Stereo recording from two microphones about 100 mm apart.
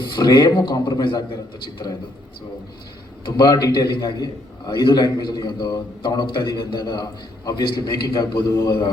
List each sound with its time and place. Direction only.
0.0 s a man's voice: 50° left (ahead or behind)
3.2 s a man's voice: 45° left (ahead or behind)